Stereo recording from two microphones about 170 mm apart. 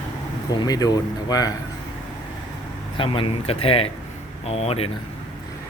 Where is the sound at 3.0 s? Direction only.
30° left (ahead or behind).